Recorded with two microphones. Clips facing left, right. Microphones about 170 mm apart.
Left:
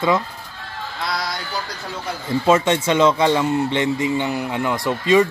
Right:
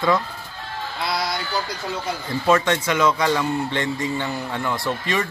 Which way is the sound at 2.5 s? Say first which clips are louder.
Left 2 dB; 20° left (ahead or behind).